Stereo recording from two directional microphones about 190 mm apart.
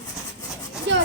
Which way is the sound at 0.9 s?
65° right (ahead or behind).